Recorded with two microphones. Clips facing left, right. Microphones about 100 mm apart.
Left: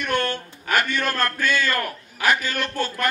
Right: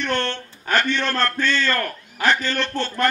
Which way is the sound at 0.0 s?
10° left (ahead or behind).